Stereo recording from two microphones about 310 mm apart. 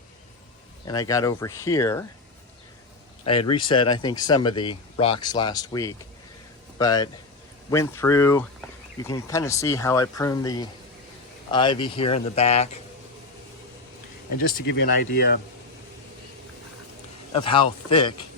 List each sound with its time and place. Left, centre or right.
0.9 s speech: centre
3.2 s speech: centre
14.5 s speech: left
17.3 s speech: centre